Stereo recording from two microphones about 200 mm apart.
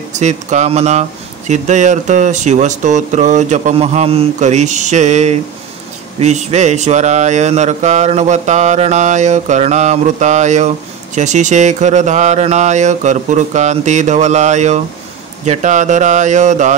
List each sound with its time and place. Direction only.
0.1 s speech: 35° right (ahead or behind)